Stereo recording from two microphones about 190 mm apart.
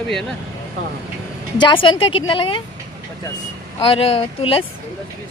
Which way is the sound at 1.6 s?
25° left (ahead or behind).